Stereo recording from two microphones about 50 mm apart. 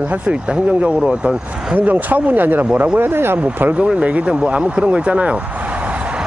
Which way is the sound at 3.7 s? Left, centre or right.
Right.